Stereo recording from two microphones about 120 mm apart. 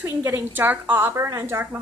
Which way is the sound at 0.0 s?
20° right (ahead or behind).